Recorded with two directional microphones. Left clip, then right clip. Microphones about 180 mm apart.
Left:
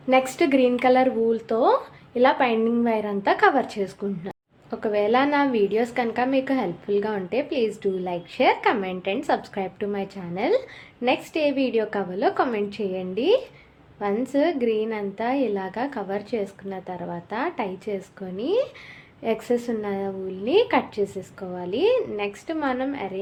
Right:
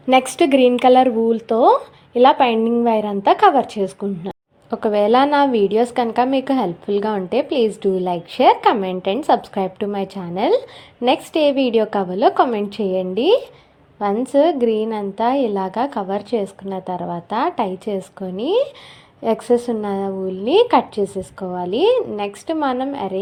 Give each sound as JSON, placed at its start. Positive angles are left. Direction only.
{"t": 0.1, "sound": "a woman's voice", "side_deg": -40}